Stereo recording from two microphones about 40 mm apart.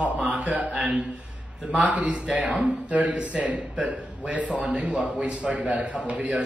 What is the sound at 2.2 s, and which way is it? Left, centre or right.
Speech, centre.